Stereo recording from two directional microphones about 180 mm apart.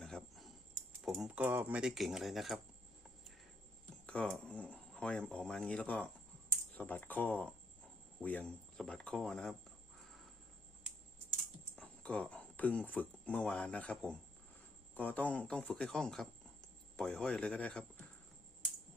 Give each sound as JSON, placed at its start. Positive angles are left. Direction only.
{"t": 0.0, "sound": "a sound", "side_deg": 0}
{"t": 4.0, "sound": "speech", "side_deg": 5}
{"t": 11.8, "sound": "speech", "side_deg": 5}